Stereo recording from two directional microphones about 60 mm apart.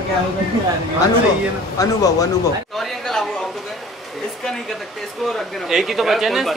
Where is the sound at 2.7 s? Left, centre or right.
Centre.